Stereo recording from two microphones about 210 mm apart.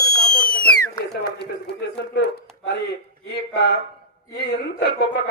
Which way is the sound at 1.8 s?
55° left (ahead or behind).